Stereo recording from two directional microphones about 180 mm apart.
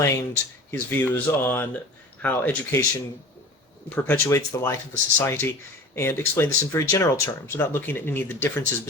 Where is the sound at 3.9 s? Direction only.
10° left (ahead or behind).